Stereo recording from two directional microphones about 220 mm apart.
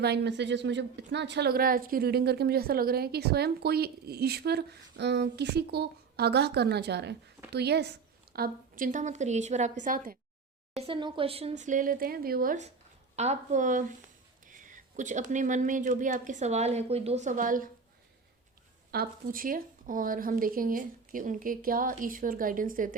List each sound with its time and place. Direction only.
0.0 s a woman's voice: 50° right (ahead or behind)
10.8 s speech: 25° right (ahead or behind)
14.4 s a sound: 35° right (ahead or behind)
15.3 s speech: 35° right (ahead or behind)
18.9 s speech: 40° right (ahead or behind)